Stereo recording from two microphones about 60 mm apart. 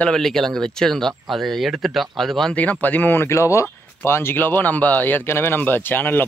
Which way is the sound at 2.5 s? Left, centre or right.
Left.